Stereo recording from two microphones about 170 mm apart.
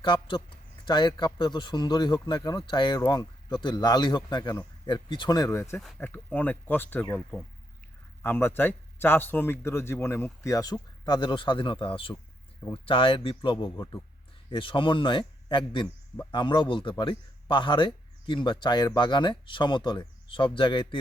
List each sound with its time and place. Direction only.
0.0 s a man's voice: 30° left (ahead or behind)